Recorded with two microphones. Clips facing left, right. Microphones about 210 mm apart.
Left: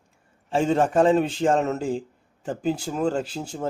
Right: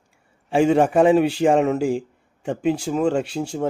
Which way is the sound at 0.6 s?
10° right (ahead or behind).